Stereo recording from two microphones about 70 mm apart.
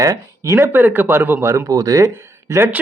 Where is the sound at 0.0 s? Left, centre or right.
Right.